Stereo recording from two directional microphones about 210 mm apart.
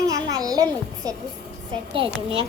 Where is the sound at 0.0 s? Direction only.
15° right (ahead or behind).